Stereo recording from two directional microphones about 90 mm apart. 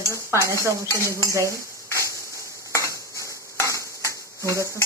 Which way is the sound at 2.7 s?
35° left (ahead or behind).